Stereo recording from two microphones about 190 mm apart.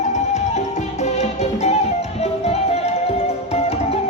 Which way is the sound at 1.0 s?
35° left (ahead or behind).